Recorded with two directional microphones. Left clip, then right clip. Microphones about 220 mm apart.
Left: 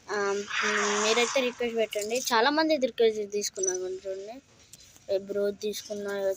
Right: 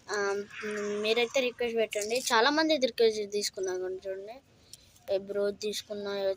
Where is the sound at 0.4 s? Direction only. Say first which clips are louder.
Left 8 dB; 35° left (ahead or behind).